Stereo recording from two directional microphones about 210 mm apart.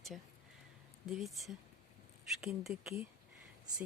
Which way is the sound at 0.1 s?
Centre (ahead or behind).